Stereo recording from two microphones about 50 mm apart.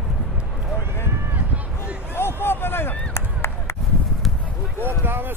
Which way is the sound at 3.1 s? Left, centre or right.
Left.